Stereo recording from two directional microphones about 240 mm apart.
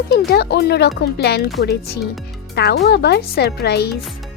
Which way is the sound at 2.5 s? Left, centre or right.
Left.